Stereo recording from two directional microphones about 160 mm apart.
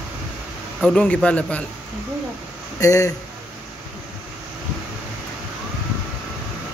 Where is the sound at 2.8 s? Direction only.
20° left (ahead or behind).